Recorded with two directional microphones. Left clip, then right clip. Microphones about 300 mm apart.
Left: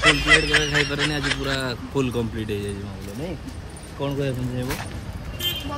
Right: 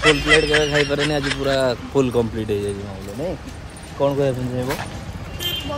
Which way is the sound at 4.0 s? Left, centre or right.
Centre.